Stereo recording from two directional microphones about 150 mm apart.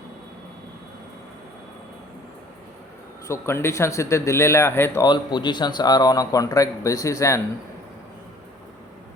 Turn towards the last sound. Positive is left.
turn(degrees=20)  # may be behind; listen again after turning